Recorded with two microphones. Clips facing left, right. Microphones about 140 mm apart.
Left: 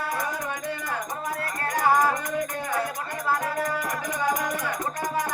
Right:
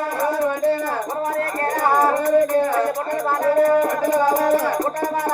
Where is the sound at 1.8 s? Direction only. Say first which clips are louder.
Right 4 dB; 45° right (ahead or behind).